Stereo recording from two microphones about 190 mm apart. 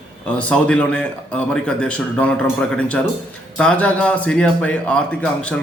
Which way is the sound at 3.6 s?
5° left (ahead or behind).